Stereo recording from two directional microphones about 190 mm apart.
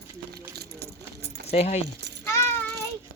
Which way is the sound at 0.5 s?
55° right (ahead or behind).